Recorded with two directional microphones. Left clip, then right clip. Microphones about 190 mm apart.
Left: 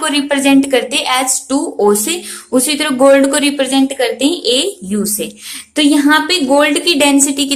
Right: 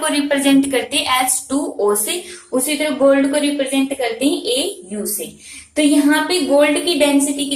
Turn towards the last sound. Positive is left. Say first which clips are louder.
# left 4 dB
turn(degrees=50)  # may be behind; listen again after turning